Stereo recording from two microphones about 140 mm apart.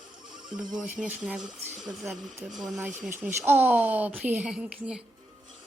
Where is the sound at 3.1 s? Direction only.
15° right (ahead or behind).